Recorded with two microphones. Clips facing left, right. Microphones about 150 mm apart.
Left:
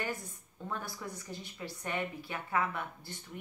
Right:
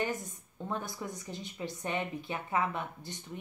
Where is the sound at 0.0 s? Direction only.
20° right (ahead or behind).